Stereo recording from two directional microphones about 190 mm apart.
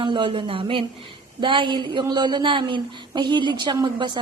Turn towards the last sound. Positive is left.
turn(degrees=-25)  # may be behind; listen again after turning